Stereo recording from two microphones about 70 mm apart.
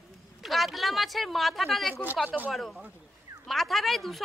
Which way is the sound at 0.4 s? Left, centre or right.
Centre.